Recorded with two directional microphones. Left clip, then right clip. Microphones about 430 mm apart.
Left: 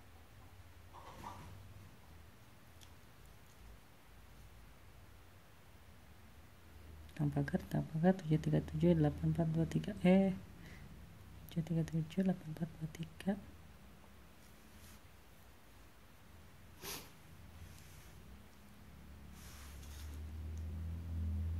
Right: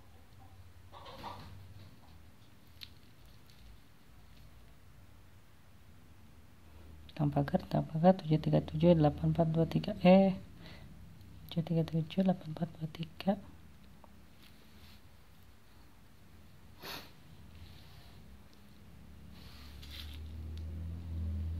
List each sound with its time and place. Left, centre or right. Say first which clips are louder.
7.2 s speech: right 7 dB; centre